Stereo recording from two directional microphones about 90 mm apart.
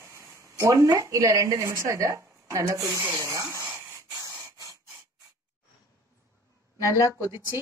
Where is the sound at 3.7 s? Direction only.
25° right (ahead or behind).